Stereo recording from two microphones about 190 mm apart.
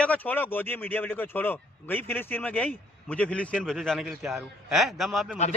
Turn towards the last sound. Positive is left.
turn(degrees=0)  # may be behind; listen again after turning